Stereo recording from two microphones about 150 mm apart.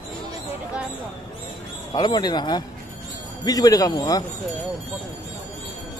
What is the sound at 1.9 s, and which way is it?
Speech, 25° left (ahead or behind).